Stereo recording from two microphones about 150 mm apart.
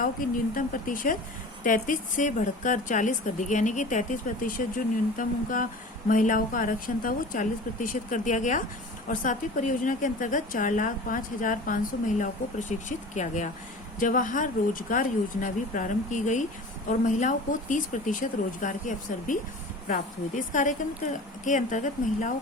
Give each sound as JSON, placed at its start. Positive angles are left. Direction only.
{"t": 0.0, "sound": "a woman's voice", "side_deg": 65}